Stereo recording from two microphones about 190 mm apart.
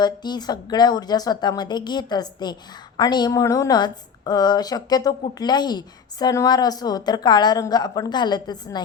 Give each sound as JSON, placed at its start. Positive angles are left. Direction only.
{"t": 0.0, "sound": "a woman's voice", "side_deg": 20}